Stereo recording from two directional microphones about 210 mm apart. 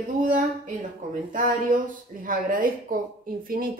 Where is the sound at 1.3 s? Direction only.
40° right (ahead or behind).